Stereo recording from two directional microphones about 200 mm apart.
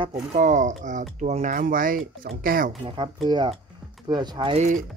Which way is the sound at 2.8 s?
25° right (ahead or behind).